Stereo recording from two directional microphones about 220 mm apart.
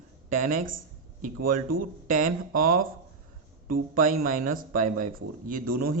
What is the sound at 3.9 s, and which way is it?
Speech, 40° right (ahead or behind).